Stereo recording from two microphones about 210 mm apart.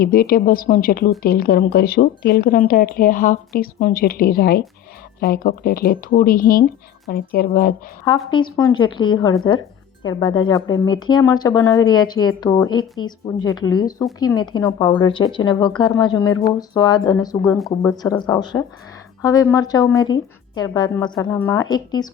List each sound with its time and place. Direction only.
0.0 s speech: 45° left (ahead or behind)
8.3 s speech: 20° left (ahead or behind)